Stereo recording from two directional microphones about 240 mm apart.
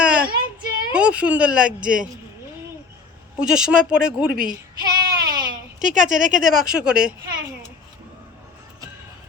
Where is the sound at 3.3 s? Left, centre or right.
Centre.